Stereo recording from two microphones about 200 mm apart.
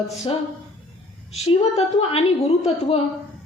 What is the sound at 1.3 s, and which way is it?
A woman's voice, 30° left (ahead or behind).